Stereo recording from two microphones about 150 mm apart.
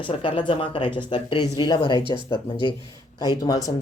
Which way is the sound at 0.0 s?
35° left (ahead or behind).